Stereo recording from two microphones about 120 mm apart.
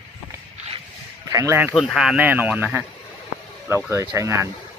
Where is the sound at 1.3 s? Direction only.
25° right (ahead or behind).